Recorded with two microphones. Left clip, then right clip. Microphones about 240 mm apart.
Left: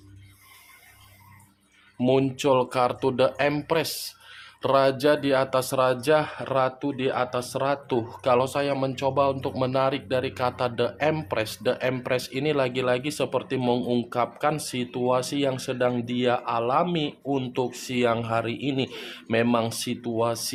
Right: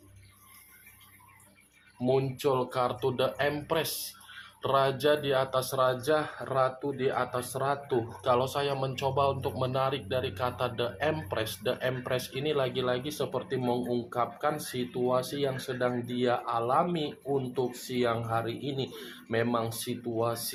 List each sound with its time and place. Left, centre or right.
2.0 s speech: left